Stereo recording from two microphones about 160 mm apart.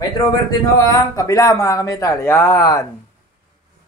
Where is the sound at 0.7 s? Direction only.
20° left (ahead or behind).